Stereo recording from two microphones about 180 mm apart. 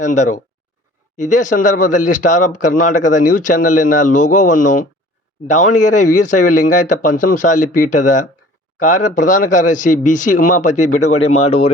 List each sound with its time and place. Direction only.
0.0 s speech: 45° left (ahead or behind)